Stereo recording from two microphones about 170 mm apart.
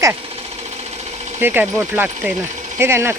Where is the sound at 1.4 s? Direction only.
10° right (ahead or behind).